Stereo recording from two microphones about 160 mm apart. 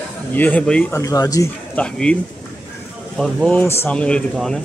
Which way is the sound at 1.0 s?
20° left (ahead or behind).